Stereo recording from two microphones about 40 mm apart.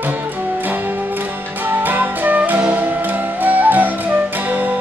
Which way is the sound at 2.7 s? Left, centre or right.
Right.